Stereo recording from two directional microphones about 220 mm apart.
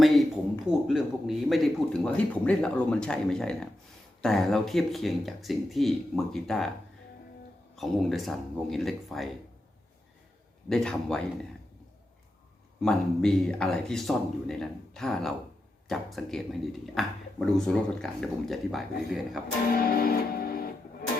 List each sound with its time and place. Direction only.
0.9 s speech: centre (ahead or behind)
7.8 s speech: centre (ahead or behind)
10.7 s speech: 5° left (ahead or behind)
12.8 s speech: 5° left (ahead or behind)
19.6 s music: 45° left (ahead or behind)